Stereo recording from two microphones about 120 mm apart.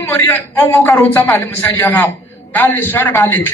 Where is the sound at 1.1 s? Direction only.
15° left (ahead or behind).